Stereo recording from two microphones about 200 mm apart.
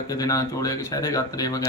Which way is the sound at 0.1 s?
15° left (ahead or behind).